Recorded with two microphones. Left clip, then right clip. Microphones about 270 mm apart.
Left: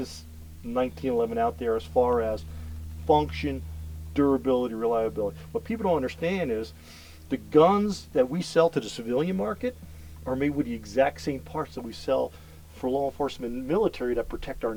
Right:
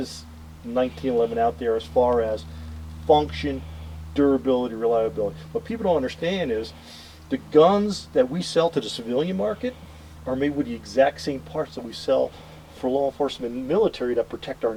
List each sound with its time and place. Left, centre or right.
0.7 s speech: left